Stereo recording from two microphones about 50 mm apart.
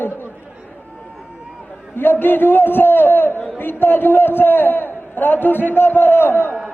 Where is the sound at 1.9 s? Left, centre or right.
Left.